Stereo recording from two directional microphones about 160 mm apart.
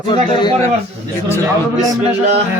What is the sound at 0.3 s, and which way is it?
Speech, 25° left (ahead or behind).